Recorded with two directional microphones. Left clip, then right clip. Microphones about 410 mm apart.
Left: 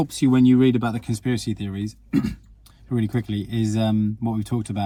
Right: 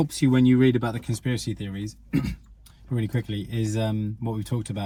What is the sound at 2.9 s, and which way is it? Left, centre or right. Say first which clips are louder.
Speech: left 4 dB; centre.